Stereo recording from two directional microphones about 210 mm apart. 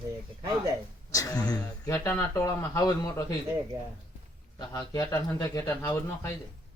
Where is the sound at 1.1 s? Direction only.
15° left (ahead or behind).